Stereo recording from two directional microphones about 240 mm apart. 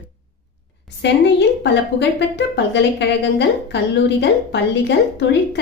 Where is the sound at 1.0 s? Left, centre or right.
Left.